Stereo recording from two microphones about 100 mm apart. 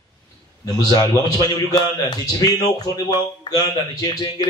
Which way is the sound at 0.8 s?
40° left (ahead or behind).